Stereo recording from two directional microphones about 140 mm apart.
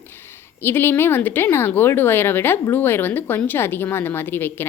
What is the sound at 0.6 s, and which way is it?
Speech, 15° left (ahead or behind).